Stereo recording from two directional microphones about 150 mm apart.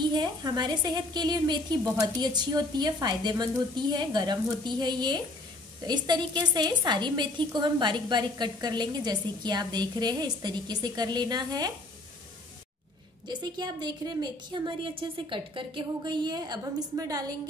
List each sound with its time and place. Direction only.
0.0 s a woman's voice: 30° right (ahead or behind)
13.3 s a woman's voice: 30° right (ahead or behind)